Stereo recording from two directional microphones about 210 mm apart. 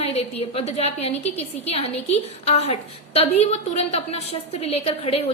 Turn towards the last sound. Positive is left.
turn(degrees=30)  # may be behind; listen again after turning